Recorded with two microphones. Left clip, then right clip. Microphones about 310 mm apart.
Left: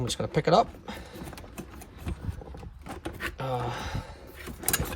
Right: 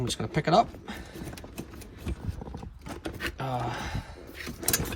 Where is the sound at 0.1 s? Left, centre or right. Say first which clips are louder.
Left 2 dB; centre.